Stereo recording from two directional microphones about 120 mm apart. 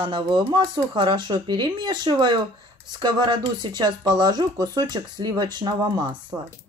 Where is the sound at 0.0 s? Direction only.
40° right (ahead or behind).